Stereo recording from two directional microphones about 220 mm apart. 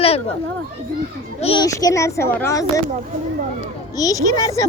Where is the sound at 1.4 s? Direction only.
25° left (ahead or behind).